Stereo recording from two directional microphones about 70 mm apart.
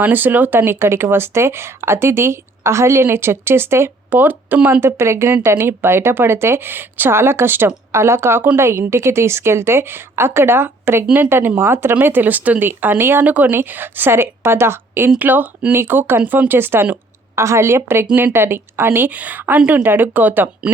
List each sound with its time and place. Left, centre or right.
0.0 s speech: right
4.8 s speech: right
17.3 s speech: right